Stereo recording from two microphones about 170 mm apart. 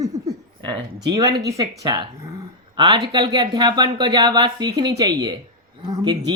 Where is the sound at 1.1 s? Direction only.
25° right (ahead or behind).